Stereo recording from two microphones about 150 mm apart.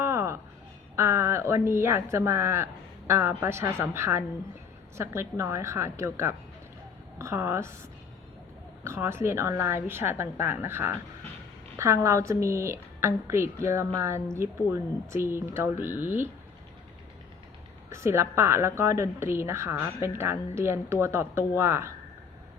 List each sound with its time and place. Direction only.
0.0 s a sound: 20° right (ahead or behind)
0.9 s a woman's voice: 15° right (ahead or behind)
8.8 s a woman's voice: 15° right (ahead or behind)
17.8 s a woman's voice: 20° right (ahead or behind)